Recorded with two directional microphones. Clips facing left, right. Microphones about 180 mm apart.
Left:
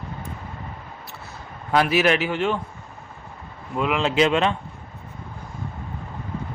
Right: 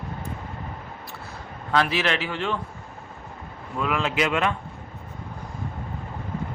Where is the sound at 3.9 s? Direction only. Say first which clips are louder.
Left 5 dB; 30° left (ahead or behind).